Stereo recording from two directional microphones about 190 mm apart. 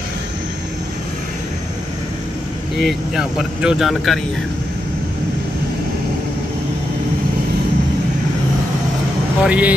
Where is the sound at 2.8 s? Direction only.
Centre (ahead or behind).